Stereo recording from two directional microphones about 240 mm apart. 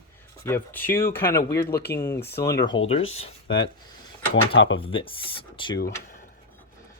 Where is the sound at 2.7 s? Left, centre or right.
Left.